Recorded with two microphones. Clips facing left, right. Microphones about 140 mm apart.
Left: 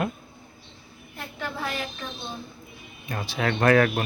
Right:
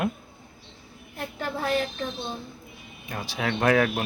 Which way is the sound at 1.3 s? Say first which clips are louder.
Right 5 dB; 40° right (ahead or behind).